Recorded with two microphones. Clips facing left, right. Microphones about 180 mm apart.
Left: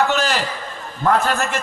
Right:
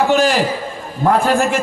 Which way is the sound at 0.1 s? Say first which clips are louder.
Right 7 dB; 15° right (ahead or behind).